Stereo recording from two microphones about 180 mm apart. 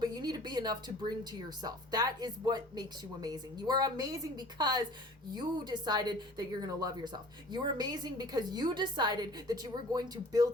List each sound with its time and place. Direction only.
0.0 s a woman's voice: 20° right (ahead or behind)